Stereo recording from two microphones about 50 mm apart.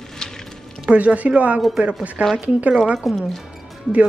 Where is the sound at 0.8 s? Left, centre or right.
Right.